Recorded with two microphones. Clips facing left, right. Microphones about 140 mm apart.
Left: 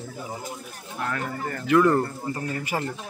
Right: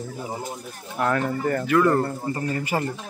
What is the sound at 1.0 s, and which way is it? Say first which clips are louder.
Speech: right 7 dB; 45° right (ahead or behind).